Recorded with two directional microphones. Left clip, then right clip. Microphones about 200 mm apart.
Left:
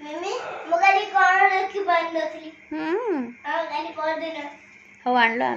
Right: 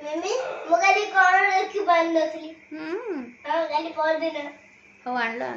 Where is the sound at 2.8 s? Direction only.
30° left (ahead or behind).